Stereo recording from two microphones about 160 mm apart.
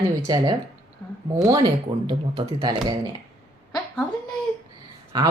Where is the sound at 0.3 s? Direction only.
25° right (ahead or behind).